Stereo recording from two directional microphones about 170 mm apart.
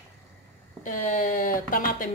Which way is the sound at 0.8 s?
50° left (ahead or behind).